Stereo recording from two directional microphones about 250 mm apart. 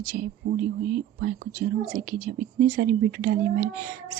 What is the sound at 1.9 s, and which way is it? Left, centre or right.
A woman's voice, right.